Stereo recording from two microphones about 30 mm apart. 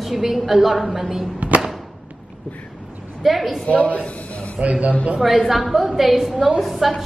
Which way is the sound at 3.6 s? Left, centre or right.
Left.